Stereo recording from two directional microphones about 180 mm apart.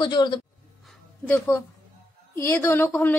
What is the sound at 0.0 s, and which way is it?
Speech, 25° left (ahead or behind).